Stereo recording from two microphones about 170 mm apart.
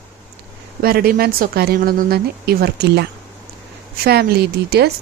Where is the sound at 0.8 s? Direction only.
60° right (ahead or behind).